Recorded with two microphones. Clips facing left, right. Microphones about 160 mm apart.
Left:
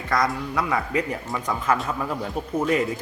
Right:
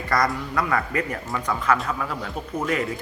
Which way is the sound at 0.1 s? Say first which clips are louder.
Even; 5° left (ahead or behind).